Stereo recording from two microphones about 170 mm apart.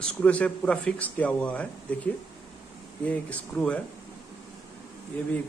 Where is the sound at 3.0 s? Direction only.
10° left (ahead or behind).